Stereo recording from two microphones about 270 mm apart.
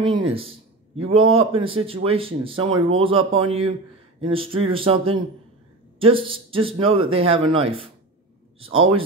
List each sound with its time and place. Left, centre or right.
0.0 s speech: centre
1.2 s a man's voice: right
1.5 s speech: centre